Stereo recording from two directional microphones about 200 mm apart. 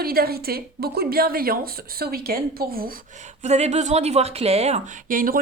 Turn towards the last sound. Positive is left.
turn(degrees=-45)  # may be behind; listen again after turning